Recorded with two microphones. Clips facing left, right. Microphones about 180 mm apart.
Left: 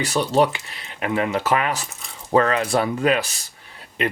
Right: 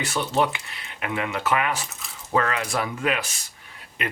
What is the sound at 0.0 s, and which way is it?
Speech, 35° left (ahead or behind).